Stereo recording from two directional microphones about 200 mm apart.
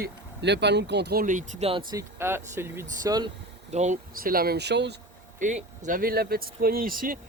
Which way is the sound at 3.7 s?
35° right (ahead or behind).